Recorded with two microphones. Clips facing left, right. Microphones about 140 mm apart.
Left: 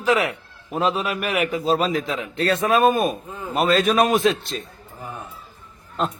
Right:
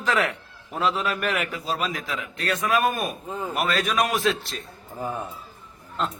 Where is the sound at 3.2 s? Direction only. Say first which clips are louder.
Right 2 dB; 30° right (ahead or behind).